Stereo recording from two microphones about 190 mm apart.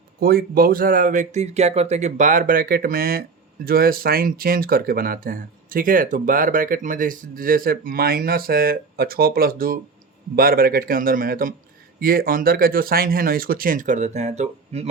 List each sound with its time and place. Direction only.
0.2 s speech: 50° right (ahead or behind); by 14.8 s 35° right (ahead or behind)